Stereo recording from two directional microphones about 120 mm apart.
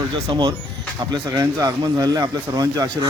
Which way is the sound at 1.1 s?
35° right (ahead or behind).